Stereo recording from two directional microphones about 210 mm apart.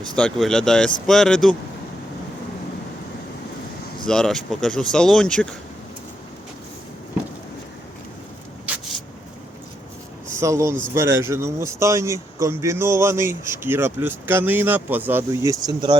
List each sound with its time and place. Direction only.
0.2 s speech: 5° left (ahead or behind)
4.0 s speech: 5° left (ahead or behind)
8.6 s vehicle: 5° right (ahead or behind)
10.4 s a man's voice: 15° right (ahead or behind)